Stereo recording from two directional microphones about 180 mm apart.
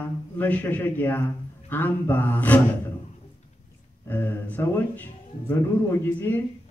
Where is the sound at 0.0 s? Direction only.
10° left (ahead or behind).